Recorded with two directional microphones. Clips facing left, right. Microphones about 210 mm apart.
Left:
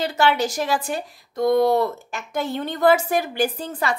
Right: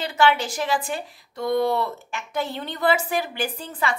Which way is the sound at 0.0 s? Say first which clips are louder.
Left 1 dB; 40° left (ahead or behind).